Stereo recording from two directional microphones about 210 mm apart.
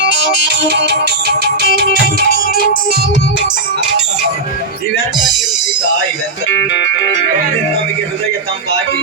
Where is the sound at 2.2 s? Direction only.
45° left (ahead or behind).